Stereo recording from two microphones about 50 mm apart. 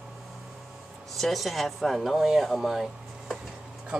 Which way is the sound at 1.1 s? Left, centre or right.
Centre.